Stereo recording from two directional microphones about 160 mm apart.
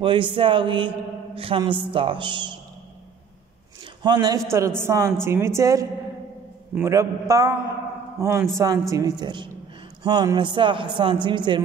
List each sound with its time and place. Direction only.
0.0 s a man's voice: 30° right (ahead or behind)
4.0 s a man's voice: 25° right (ahead or behind)